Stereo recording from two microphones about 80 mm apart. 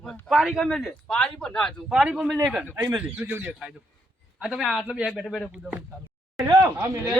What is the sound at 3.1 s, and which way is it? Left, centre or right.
A man's voice, centre.